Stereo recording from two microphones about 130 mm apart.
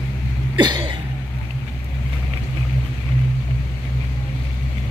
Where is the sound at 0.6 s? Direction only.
35° right (ahead or behind).